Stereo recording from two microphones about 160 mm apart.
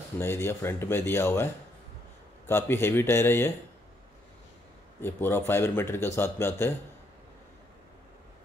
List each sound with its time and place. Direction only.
0.2 s a man's voice: 15° left (ahead or behind)
5.0 s a man's voice: 15° left (ahead or behind)